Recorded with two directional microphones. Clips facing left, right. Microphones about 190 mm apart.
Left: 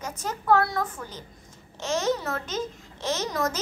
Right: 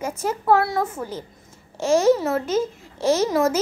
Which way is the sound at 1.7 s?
10° right (ahead or behind).